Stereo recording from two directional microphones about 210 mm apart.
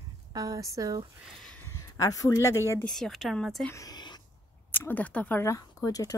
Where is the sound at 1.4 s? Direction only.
10° left (ahead or behind).